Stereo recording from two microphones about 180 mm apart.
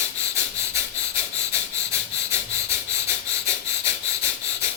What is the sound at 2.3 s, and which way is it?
Wheeze, 15° right (ahead or behind).